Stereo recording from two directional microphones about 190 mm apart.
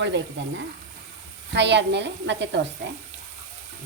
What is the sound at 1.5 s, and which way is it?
Speech, 65° right (ahead or behind).